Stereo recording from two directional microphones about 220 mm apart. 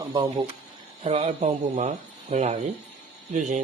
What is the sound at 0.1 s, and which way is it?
Speech, 20° right (ahead or behind).